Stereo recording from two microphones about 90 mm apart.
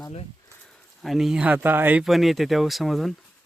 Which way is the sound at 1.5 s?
20° right (ahead or behind).